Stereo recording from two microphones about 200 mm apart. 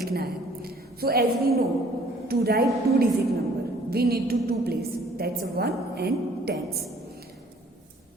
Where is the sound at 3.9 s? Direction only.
50° right (ahead or behind).